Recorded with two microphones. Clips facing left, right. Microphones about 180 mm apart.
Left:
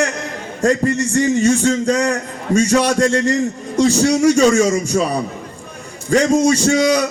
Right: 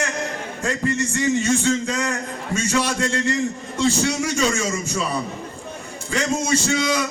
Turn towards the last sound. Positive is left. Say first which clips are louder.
# left 7 dB
turn(degrees=40)  # may be behind; listen again after turning